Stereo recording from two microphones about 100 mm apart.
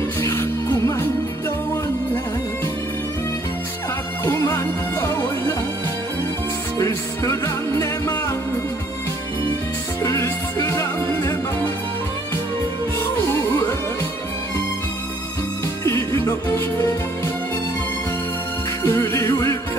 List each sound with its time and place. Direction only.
0.2 s music: 25° left (ahead or behind)
4.2 s music: 25° left (ahead or behind)
6.8 s music: 30° left (ahead or behind)
10.0 s music: 30° left (ahead or behind)
13.3 s music: 25° left (ahead or behind)
15.8 s music: 30° left (ahead or behind)
18.8 s music: 25° left (ahead or behind)